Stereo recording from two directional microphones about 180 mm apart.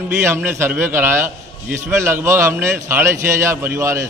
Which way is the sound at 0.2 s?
15° right (ahead or behind).